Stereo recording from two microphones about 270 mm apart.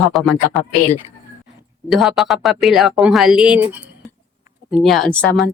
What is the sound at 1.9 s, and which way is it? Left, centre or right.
Speech, centre.